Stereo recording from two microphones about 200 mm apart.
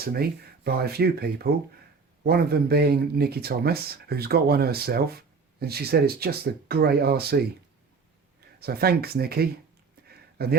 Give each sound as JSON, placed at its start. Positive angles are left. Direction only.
{"t": 0.0, "sound": "speech", "side_deg": -50}
{"t": 8.5, "sound": "speech", "side_deg": -50}
{"t": 10.1, "sound": "a sound", "side_deg": -50}